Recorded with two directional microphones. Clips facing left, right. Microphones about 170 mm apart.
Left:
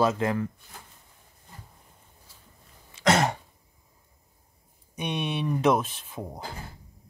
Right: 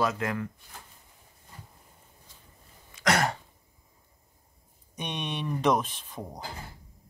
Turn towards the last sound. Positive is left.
turn(degrees=5)  # may be behind; listen again after turning